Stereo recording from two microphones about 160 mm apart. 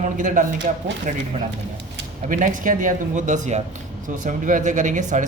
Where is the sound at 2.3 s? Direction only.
55° right (ahead or behind).